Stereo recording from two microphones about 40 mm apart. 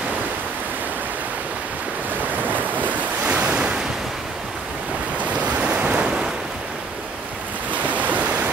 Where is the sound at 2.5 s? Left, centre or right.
Right.